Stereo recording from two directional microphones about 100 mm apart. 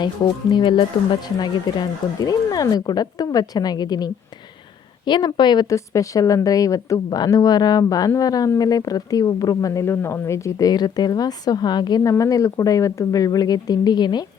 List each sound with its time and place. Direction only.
0.5 s speech: 55° left (ahead or behind)
1.4 s speech: 40° left (ahead or behind)
5.6 s speech: 30° left (ahead or behind)
12.1 s speech: 35° left (ahead or behind)